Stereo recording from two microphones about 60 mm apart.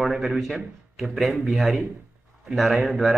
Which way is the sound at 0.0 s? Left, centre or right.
Centre.